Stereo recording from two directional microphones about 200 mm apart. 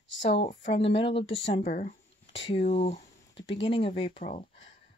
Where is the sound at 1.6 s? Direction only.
40° left (ahead or behind).